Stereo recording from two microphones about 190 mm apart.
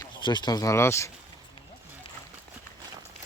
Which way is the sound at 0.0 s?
25° left (ahead or behind).